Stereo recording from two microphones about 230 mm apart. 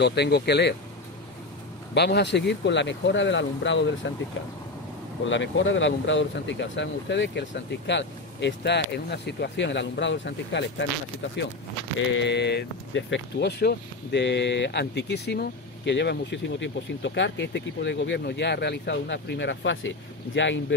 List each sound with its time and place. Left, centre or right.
0.0 s speech: left
2.0 s speech: left
5.3 s speech: left
12.2 s speech: left